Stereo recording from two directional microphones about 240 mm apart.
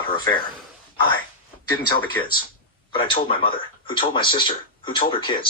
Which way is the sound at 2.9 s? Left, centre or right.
Left.